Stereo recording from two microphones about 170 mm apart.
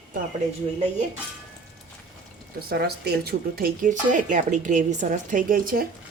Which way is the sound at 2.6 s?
65° right (ahead or behind).